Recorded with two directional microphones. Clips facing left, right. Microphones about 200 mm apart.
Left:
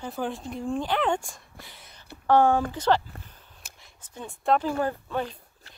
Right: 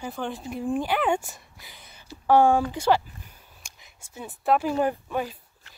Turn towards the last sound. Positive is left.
turn(degrees=-10)  # may be behind; listen again after turning